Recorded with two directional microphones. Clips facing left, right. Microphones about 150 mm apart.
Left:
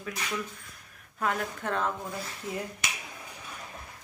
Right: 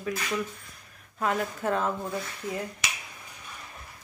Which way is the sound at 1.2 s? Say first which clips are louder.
Right 3 dB; 5° right (ahead or behind).